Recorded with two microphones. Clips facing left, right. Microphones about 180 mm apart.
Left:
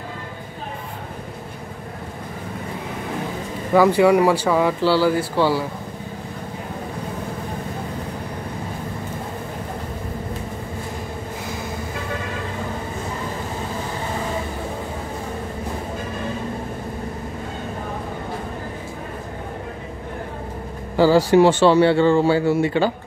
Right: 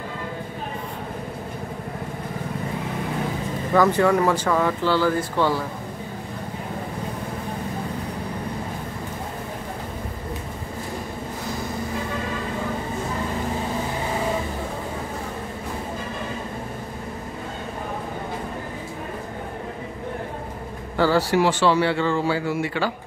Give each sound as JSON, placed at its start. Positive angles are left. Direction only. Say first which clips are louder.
{"t": 3.7, "sound": "speech", "louder": "left 4 dB", "side_deg": 10}
{"t": 20.9, "sound": "speech", "louder": "left 5 dB", "side_deg": 10}
{"t": 21.4, "sound": "a man's voice", "louder": "left 7 dB", "side_deg": 25}